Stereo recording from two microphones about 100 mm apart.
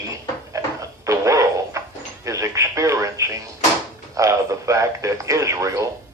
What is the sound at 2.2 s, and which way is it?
Speech, 30° right (ahead or behind).